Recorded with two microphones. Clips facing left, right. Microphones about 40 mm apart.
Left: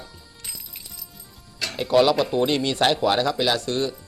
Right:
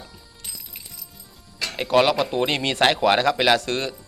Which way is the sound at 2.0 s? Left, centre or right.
Right.